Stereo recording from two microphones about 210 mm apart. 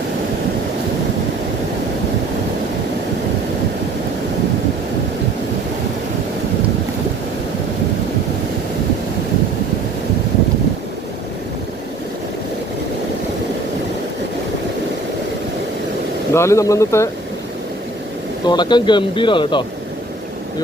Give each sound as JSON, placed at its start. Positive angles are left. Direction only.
{"t": 16.3, "sound": "speech", "side_deg": 15}
{"t": 18.4, "sound": "speech", "side_deg": 20}